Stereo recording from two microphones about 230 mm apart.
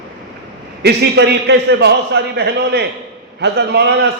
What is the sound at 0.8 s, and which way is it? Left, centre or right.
A man's voice, right.